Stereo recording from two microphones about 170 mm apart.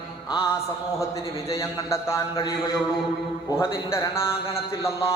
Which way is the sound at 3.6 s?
15° left (ahead or behind).